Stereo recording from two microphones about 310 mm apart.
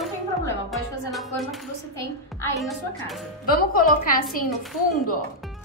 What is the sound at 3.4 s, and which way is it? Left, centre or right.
Speech, left.